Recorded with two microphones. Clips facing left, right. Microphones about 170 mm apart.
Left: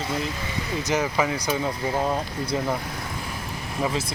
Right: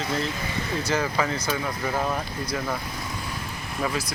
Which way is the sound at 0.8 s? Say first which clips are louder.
Left 2 dB; 20° left (ahead or behind).